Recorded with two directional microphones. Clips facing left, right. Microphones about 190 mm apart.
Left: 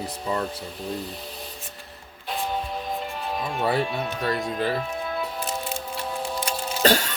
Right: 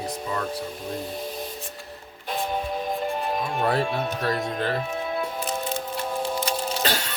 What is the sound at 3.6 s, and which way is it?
Speech, centre (ahead or behind).